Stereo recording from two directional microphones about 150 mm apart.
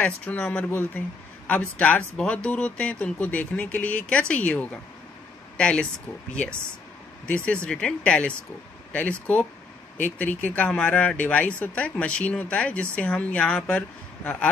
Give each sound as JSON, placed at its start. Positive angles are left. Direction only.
{"t": 0.0, "sound": "speech", "side_deg": 5}
{"t": 7.2, "sound": "speech", "side_deg": 10}
{"t": 10.1, "sound": "speech", "side_deg": 10}